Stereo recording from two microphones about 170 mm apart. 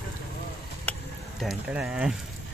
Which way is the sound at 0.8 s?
5° left (ahead or behind).